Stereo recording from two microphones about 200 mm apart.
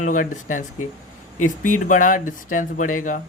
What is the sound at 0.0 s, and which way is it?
Speech, 40° left (ahead or behind).